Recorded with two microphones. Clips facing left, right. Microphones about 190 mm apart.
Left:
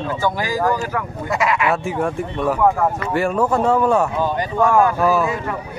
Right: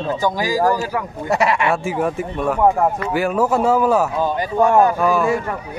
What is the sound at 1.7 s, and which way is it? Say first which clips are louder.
Speech: right 1 dB; centre (ahead or behind).